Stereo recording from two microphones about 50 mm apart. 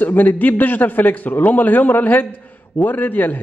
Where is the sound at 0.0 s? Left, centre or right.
Left.